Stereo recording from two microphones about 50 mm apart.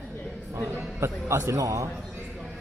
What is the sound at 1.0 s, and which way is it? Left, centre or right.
Speech, right.